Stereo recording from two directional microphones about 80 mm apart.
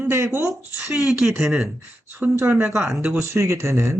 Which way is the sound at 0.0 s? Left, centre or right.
Right.